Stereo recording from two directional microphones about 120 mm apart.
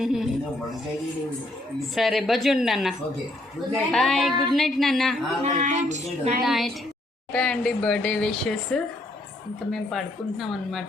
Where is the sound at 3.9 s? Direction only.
Centre (ahead or behind).